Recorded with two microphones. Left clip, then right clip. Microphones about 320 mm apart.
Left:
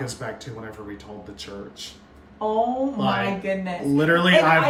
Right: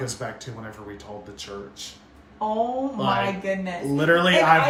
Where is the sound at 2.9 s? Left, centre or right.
Centre.